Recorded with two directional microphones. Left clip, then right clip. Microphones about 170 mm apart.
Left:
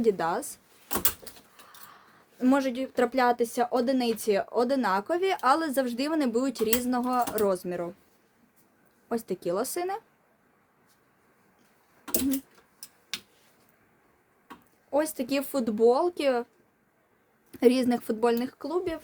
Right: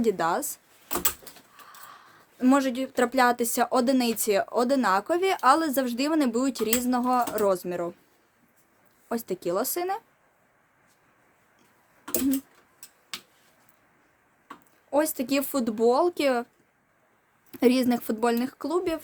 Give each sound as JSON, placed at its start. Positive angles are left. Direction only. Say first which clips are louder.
{"t": 0.0, "sound": "speech", "louder": "right 1 dB", "side_deg": -20}
{"t": 1.8, "sound": "speech", "louder": "right 4 dB", "side_deg": -20}
{"t": 9.0, "sound": "speech", "louder": "right 1 dB", "side_deg": -15}
{"t": 14.8, "sound": "speech", "louder": "right 2 dB", "side_deg": -20}
{"t": 17.5, "sound": "speech", "louder": "even", "side_deg": -20}